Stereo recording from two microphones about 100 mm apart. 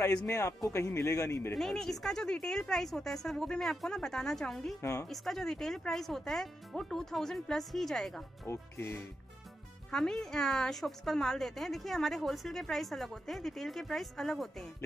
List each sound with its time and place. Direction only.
0.3 s speech: 35° left (ahead or behind)
1.5 s a woman's voice: 5° left (ahead or behind)
8.5 s music: 25° left (ahead or behind)
9.8 s a woman's voice: 5° left (ahead or behind)